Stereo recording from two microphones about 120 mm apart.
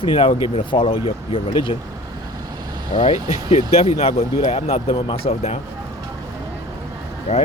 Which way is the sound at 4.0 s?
55° left (ahead or behind).